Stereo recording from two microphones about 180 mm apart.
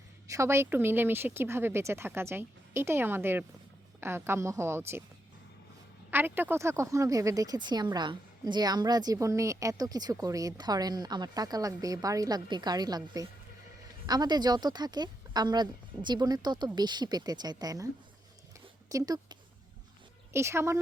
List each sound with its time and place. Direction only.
0.3 s speech: 15° right (ahead or behind)
6.1 s speech: 10° right (ahead or behind)
18.9 s speech: 20° right (ahead or behind)